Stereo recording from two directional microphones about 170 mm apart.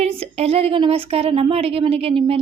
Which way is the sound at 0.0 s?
35° right (ahead or behind).